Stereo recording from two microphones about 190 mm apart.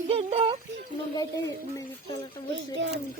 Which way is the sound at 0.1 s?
30° right (ahead or behind).